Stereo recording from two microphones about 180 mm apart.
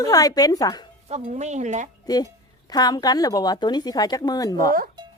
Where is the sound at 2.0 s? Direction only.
20° left (ahead or behind).